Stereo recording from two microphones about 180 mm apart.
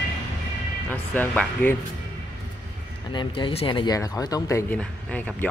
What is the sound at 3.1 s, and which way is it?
Speech, 25° left (ahead or behind).